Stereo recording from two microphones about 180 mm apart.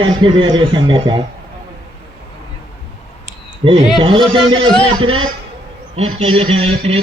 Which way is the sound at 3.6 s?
25° right (ahead or behind).